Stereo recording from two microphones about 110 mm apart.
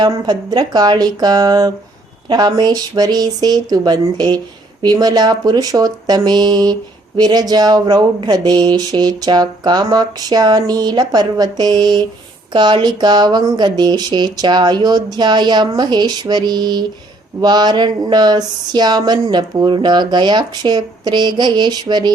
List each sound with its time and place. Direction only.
0.0 s speech: 40° right (ahead or behind)